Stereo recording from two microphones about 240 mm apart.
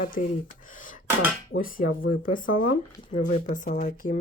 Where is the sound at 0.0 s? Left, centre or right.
Left.